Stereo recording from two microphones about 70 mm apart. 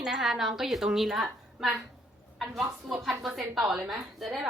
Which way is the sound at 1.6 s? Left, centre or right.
Centre.